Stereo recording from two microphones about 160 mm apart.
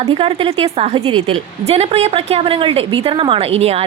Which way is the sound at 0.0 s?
35° right (ahead or behind).